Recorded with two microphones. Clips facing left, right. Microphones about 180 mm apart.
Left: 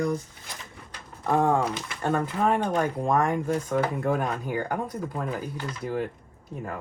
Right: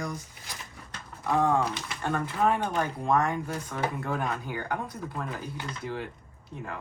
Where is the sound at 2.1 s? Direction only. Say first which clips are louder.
Left 2 dB; 40° left (ahead or behind).